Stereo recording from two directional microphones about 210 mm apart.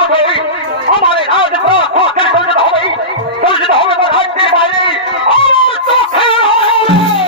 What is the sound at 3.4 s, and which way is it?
Fowl, 25° left (ahead or behind).